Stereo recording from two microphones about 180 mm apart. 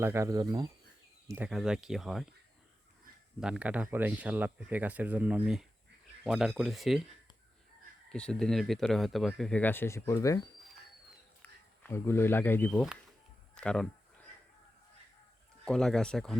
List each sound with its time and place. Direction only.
0.0 s speech: 15° right (ahead or behind)
1.3 s speech: 5° right (ahead or behind)
3.4 s speech: 5° right (ahead or behind)
8.1 s speech: 5° left (ahead or behind)
13.6 s a sound: 5° left (ahead or behind)
15.6 s speech: 5° left (ahead or behind)